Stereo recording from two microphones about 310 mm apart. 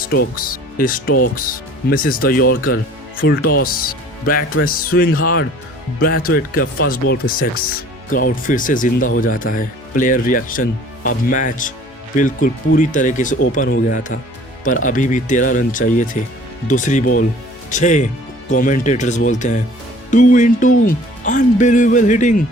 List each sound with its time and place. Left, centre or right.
0.1 s speech: left